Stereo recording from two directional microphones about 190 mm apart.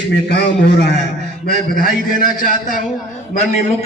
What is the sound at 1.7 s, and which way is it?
A man's voice, 50° left (ahead or behind).